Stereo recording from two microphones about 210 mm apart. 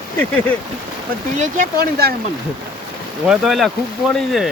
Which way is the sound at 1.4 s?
40° right (ahead or behind).